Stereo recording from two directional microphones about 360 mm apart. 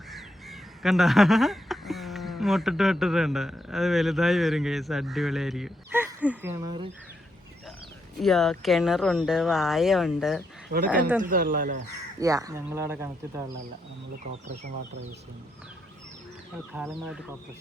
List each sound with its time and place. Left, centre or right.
0.1 s speech: centre
8.2 s speech: centre
11.2 s speech: right
12.2 s speech: centre
14.6 s speech: right
16.7 s speech: centre